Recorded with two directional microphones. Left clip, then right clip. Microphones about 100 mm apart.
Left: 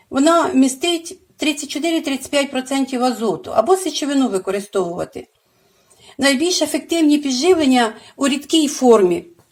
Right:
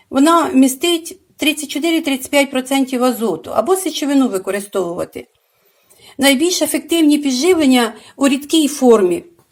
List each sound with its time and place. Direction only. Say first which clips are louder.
0.1 s a woman's voice: right 2 dB; 25° right (ahead or behind)